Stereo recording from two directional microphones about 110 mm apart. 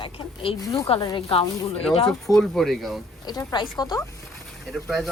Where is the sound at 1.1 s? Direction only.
60° left (ahead or behind).